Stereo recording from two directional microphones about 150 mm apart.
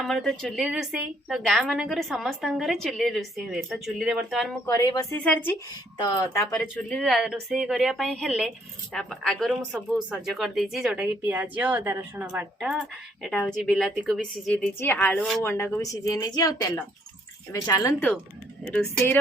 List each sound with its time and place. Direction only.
0.0 s speech: centre (ahead or behind)
4.6 s speech: 25° left (ahead or behind)
5.1 s a woman's voice: 10° left (ahead or behind)
6.0 s speech: 30° left (ahead or behind)
6.6 s a woman's voice: 10° left (ahead or behind)
7.0 s speech: 5° right (ahead or behind)
12.8 s a woman's voice: 5° left (ahead or behind); by 17.9 s 20° left (ahead or behind)
18.6 s speech: centre (ahead or behind)